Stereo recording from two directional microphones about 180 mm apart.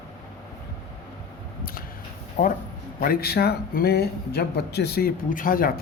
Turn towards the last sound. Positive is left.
turn(degrees=55)  # may be behind; listen again after turning